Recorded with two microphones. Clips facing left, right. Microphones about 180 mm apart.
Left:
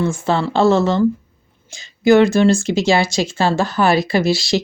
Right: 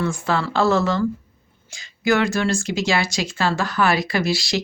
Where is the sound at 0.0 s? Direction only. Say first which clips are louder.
Left 4 dB; 25° left (ahead or behind).